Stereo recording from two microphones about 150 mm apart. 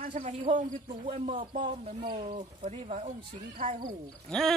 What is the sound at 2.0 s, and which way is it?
Speech, 40° right (ahead or behind).